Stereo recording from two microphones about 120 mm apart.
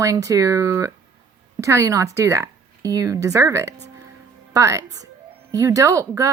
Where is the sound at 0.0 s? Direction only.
25° right (ahead or behind).